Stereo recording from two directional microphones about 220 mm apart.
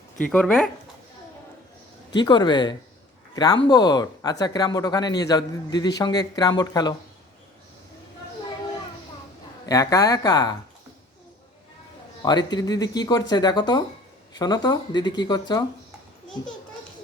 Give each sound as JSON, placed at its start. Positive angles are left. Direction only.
{"t": 0.3, "sound": "speech", "side_deg": 5}
{"t": 2.1, "sound": "speech", "side_deg": 20}
{"t": 9.6, "sound": "speech", "side_deg": 15}
{"t": 12.2, "sound": "speech", "side_deg": 20}